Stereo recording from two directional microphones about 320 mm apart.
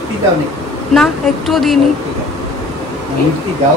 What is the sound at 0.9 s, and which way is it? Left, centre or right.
Speech, centre.